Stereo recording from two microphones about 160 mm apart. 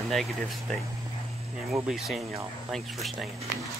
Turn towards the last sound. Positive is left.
turn(degrees=0)  # may be behind; listen again after turning